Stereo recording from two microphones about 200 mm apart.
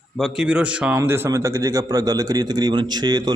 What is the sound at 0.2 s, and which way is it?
A man's voice, 5° right (ahead or behind).